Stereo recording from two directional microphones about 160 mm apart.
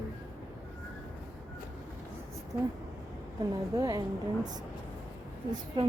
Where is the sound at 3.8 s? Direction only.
25° right (ahead or behind).